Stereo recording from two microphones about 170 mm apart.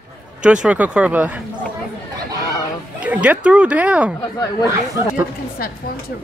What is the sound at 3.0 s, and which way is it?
Speech, 10° right (ahead or behind).